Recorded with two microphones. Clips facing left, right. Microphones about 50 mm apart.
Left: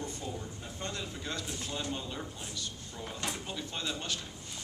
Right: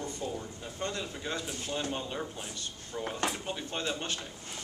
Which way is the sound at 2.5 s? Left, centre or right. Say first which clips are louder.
Right 3 dB; right.